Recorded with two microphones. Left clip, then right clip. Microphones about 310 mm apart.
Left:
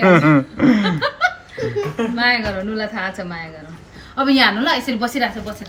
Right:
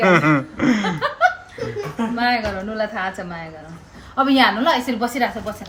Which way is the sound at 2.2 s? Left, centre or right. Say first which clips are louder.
Left 2 dB; centre.